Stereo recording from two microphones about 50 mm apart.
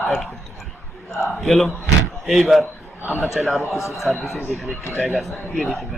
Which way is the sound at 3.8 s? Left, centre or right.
Left.